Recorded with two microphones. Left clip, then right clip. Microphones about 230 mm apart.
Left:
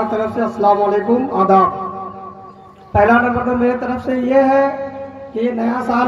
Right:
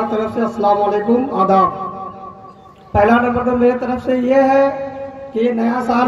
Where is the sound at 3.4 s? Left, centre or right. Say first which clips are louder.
Right 2 dB; right.